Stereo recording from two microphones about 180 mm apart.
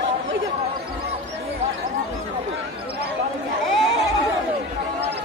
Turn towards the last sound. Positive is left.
turn(degrees=0)  # may be behind; listen again after turning